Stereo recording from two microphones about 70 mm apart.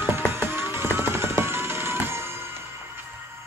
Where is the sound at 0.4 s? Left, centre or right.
Right.